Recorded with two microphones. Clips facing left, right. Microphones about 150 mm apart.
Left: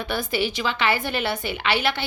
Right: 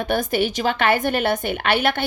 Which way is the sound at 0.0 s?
50° right (ahead or behind).